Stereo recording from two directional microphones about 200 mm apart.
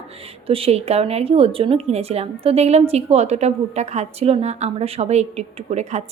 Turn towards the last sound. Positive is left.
turn(degrees=-35)  # may be behind; listen again after turning